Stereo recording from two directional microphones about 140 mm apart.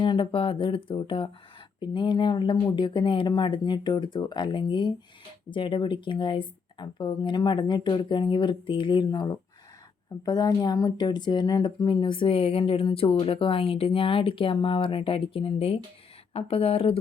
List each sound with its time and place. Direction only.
0.0 s speech: 35° left (ahead or behind)